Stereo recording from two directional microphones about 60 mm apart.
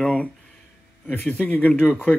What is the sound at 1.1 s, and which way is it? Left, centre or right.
Speech, left.